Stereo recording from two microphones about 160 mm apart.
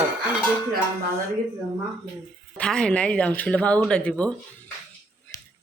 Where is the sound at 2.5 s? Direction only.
5° left (ahead or behind).